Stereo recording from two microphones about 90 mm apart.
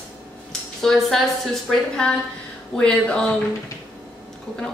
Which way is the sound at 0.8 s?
5° left (ahead or behind).